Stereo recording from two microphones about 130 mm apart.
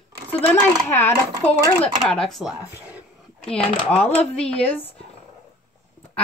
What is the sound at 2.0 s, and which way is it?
Speech, 5° left (ahead or behind).